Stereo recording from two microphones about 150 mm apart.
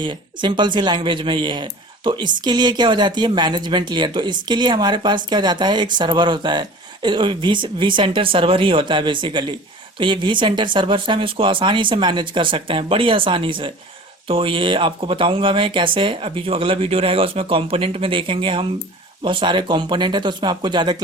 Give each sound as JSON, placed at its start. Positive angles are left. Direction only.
{"t": 0.0, "sound": "speech", "side_deg": -30}